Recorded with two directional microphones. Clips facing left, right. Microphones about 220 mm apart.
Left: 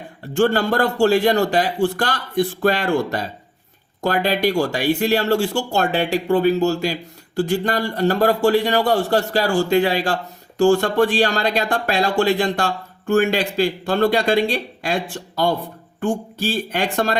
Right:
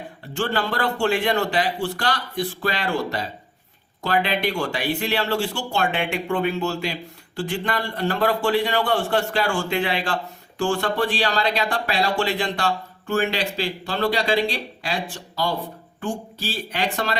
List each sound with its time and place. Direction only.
0.3 s speech: 45° left (ahead or behind)